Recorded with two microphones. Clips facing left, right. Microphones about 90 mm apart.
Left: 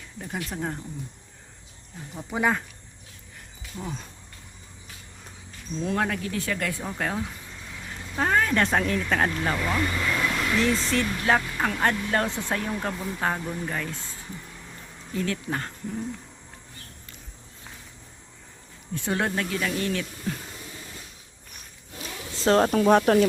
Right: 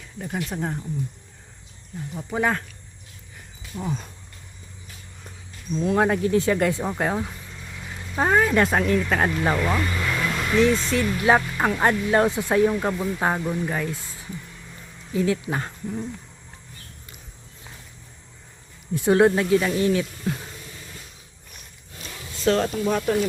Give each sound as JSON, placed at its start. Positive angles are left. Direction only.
{"t": 0.2, "sound": "speech", "side_deg": 0}
{"t": 2.1, "sound": "speech", "side_deg": 0}
{"t": 3.8, "sound": "speech", "side_deg": -5}
{"t": 6.0, "sound": "speech", "side_deg": -25}
{"t": 11.2, "sound": "speech", "side_deg": -20}
{"t": 15.1, "sound": "speech", "side_deg": -10}
{"t": 18.9, "sound": "speech", "side_deg": -15}
{"t": 22.4, "sound": "speech", "side_deg": 40}
{"t": 22.7, "sound": "speech", "side_deg": 65}